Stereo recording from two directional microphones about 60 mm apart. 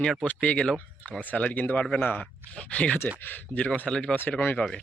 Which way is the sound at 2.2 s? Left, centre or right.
Centre.